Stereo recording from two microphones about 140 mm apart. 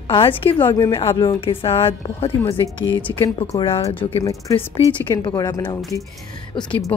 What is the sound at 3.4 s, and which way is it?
Speech, 40° left (ahead or behind).